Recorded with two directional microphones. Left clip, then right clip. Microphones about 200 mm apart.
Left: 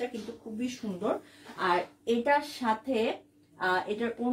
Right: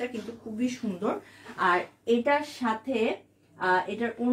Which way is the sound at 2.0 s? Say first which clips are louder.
Right 2 dB; 5° left (ahead or behind).